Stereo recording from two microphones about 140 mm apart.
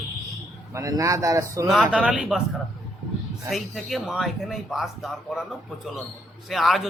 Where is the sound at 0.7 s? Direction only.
25° right (ahead or behind).